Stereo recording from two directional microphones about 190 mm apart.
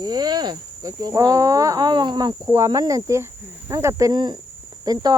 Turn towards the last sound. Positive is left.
turn(degrees=-20)  # may be behind; listen again after turning